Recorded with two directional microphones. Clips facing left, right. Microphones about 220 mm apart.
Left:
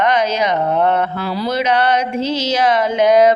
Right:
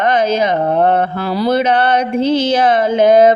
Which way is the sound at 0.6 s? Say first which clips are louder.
Right 3 dB; 30° right (ahead or behind).